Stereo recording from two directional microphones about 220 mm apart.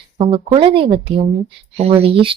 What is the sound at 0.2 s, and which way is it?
A woman's voice, 25° right (ahead or behind).